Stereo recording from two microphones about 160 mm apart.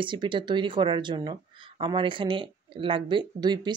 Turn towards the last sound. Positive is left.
turn(degrees=-25)  # may be behind; listen again after turning